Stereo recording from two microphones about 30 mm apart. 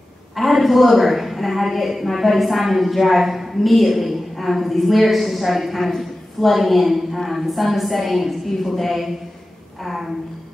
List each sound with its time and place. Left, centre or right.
0.4 s a woman's voice: centre